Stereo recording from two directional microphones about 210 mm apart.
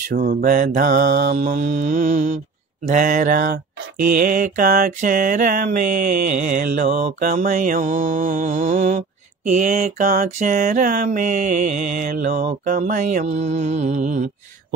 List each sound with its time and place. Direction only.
0.1 s mantra: 45° right (ahead or behind)
1.6 s mantra: 35° right (ahead or behind)